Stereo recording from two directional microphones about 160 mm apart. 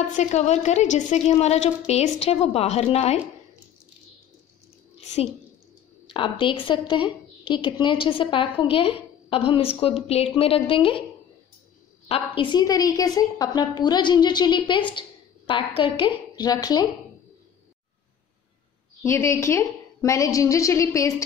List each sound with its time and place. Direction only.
0.1 s a woman's voice: 45° left (ahead or behind)
5.0 s a sound: 45° left (ahead or behind)
6.0 s a woman's voice: 30° left (ahead or behind)
12.1 s a woman's voice: 30° left (ahead or behind)
19.0 s a woman's voice: 15° left (ahead or behind)